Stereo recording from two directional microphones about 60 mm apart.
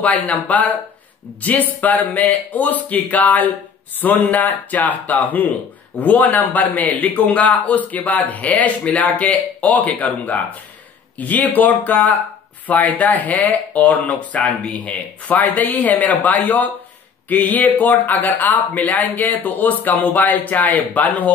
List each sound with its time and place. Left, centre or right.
0.0 s speech: left